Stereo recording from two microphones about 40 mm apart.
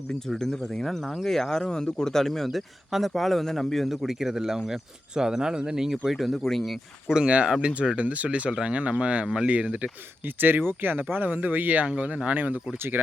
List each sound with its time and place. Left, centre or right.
0.3 s speech: centre
3.8 s speech: centre
6.1 s speech: centre
7.3 s speech: right
8.4 s speech: right
10.2 s speech: right